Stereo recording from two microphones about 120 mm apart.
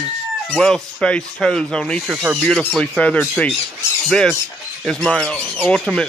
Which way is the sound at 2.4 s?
5° left (ahead or behind).